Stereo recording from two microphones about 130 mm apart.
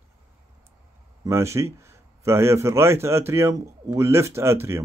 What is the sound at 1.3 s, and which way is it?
Speech, 20° right (ahead or behind).